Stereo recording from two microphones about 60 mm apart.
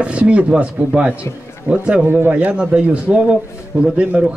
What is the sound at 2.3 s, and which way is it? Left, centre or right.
Speech, right.